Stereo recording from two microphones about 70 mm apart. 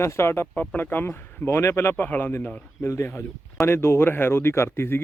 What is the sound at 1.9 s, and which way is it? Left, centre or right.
Speech, left.